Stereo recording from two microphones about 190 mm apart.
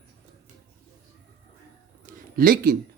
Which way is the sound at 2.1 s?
50° right (ahead or behind).